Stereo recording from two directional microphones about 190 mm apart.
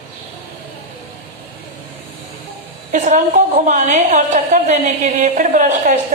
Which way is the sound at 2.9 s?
40° right (ahead or behind).